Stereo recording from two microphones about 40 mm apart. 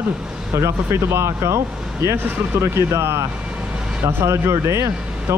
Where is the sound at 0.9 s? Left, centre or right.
Right.